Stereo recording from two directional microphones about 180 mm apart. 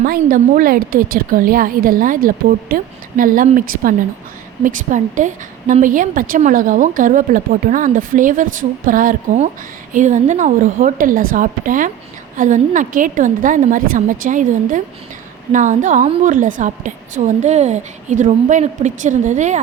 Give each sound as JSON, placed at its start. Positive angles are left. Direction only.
{"t": 0.0, "sound": "a woman's voice", "side_deg": -50}